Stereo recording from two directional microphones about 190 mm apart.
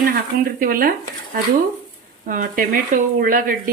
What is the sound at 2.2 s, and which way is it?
Speech, 45° right (ahead or behind).